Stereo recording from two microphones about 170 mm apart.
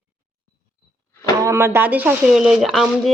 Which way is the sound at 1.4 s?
15° right (ahead or behind).